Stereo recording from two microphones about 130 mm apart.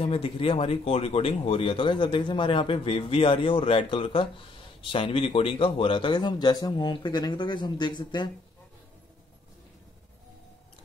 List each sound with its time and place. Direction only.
0.0 s a man's voice: 45° left (ahead or behind)